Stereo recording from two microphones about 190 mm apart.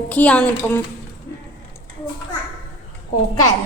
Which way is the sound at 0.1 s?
5° left (ahead or behind).